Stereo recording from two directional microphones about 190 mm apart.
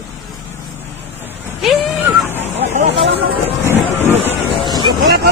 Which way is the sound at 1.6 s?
Centre (ahead or behind).